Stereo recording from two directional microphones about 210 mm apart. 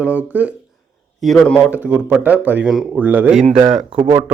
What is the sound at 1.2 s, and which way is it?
Speech, 5° left (ahead or behind).